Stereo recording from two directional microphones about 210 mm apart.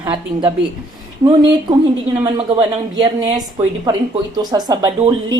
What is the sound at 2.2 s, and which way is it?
A woman's voice, 20° right (ahead or behind).